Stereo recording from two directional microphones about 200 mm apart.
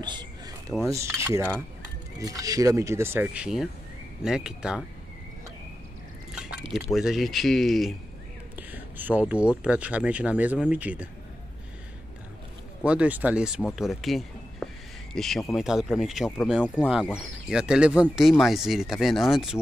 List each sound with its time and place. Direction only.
0.0 s a sound: 20° right (ahead or behind)
0.9 s speech: 15° right (ahead or behind)
6.3 s pour: 5° right (ahead or behind)
6.9 s speech: centre (ahead or behind)
12.8 s speech: 5° right (ahead or behind)